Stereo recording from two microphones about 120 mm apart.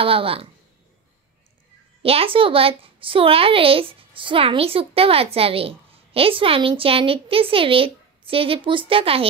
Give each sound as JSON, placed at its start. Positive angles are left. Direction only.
{"t": 0.0, "sound": "a woman's voice", "side_deg": -50}
{"t": 2.0, "sound": "a woman's voice", "side_deg": -50}